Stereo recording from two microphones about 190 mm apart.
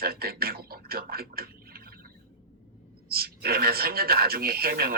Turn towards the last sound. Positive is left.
turn(degrees=-55)  # may be behind; listen again after turning